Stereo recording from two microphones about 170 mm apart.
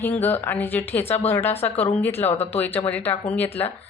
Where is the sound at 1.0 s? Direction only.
35° left (ahead or behind).